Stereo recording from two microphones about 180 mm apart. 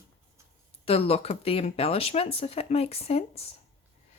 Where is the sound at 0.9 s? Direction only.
35° left (ahead or behind).